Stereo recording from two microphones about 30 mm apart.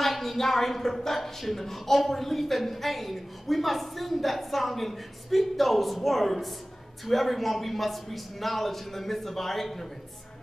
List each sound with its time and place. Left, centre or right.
0.0 s a woman's voice: centre